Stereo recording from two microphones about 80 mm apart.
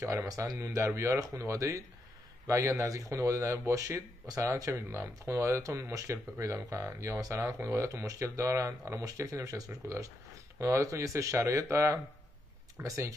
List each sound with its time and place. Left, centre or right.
0.0 s speech: right